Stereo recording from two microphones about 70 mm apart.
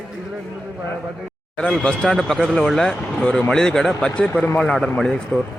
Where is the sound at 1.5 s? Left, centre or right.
Centre.